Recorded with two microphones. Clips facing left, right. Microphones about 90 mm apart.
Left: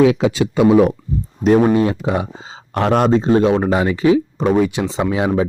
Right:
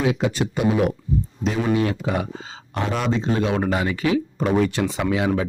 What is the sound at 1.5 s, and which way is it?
Speech, 50° left (ahead or behind).